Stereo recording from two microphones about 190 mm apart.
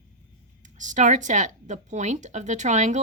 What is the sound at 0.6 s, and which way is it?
Speech, 40° right (ahead or behind).